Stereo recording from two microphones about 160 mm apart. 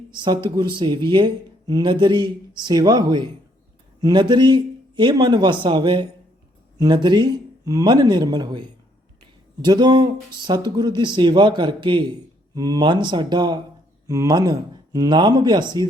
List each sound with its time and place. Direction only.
0.1 s a man's voice: 30° right (ahead or behind)